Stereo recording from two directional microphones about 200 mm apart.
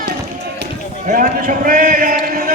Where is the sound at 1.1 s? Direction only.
45° right (ahead or behind).